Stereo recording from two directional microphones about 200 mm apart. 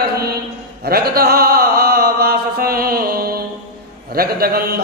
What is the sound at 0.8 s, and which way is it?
Chant, 50° right (ahead or behind).